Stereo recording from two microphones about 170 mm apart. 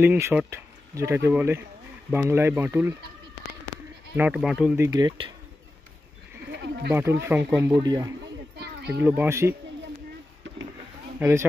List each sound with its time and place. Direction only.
0.0 s speech: 10° right (ahead or behind)
4.2 s speech: 5° right (ahead or behind)
4.7 s speech: 20° right (ahead or behind)
6.5 s a sound: 80° right
6.9 s speech: 15° right (ahead or behind)
8.5 s a sound: 75° right (ahead or behind)
9.0 s speech: 10° right (ahead or behind)
11.1 s speech: 10° right (ahead or behind)